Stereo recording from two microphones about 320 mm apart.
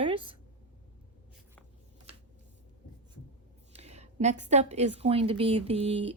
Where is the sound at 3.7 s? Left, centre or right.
Centre.